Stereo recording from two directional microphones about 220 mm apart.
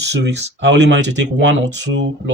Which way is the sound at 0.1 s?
50° right (ahead or behind).